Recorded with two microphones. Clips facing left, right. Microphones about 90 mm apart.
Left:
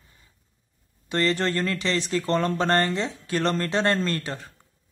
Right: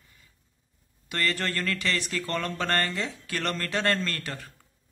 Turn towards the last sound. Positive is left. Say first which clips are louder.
# left 5 dB
turn(degrees=25)  # may be behind; listen again after turning